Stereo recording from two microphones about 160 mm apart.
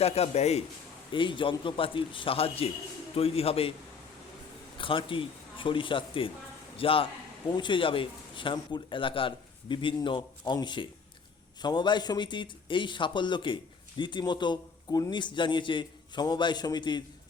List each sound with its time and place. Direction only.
0.0 s a man's voice: 40° left (ahead or behind)
1.1 s a man's voice: 30° left (ahead or behind)
4.8 s a man's voice: 30° left (ahead or behind)